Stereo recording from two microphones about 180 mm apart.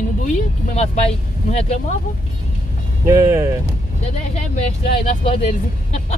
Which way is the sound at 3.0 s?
15° right (ahead or behind).